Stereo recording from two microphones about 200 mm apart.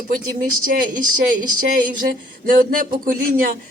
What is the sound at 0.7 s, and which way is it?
Speech, 50° right (ahead or behind).